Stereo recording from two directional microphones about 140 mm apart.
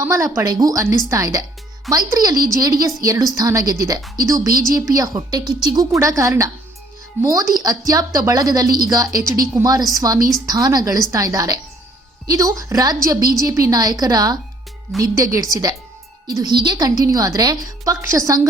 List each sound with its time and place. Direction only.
0.0 s a woman's voice: 20° right (ahead or behind)